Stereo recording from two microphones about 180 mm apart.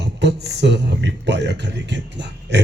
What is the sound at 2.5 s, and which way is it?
Music, 70° right (ahead or behind).